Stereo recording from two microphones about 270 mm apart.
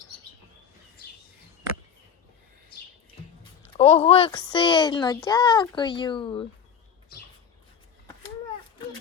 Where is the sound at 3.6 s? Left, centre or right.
Left.